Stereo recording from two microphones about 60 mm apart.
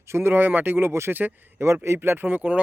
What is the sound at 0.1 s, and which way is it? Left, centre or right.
Speech, right.